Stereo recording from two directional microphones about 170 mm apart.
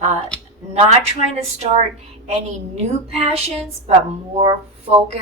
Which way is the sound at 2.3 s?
35° right (ahead or behind).